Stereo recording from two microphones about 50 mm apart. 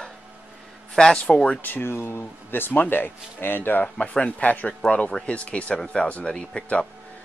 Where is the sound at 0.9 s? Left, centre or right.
Centre.